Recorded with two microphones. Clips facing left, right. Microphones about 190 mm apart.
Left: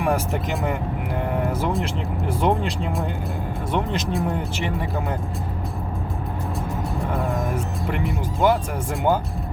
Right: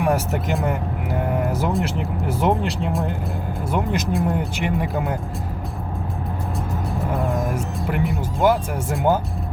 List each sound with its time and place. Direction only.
0.0 s speech: 5° right (ahead or behind)
4.5 s speech: 15° right (ahead or behind)
7.2 s speech: centre (ahead or behind)